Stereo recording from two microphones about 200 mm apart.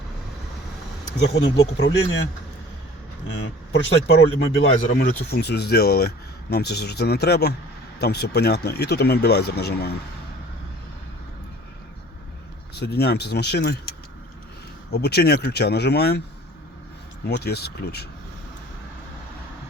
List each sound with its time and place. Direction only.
1.2 s speech: 60° left (ahead or behind)
3.7 s speech: 60° left (ahead or behind)
12.7 s speech: 55° left (ahead or behind)
14.9 s speech: 55° left (ahead or behind)
17.2 s speech: 55° left (ahead or behind)